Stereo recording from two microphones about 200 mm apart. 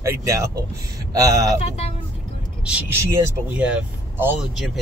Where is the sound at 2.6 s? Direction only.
10° right (ahead or behind).